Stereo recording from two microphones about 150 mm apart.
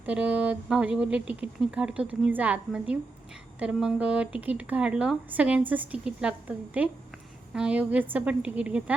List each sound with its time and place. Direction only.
0.0 s speech: 10° right (ahead or behind)